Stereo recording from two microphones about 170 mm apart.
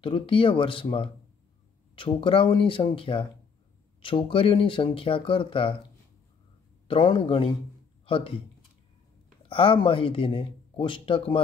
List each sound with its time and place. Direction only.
0.0 s speech: 30° left (ahead or behind)
6.9 s speech: 30° left (ahead or behind)
9.5 s speech: 30° left (ahead or behind)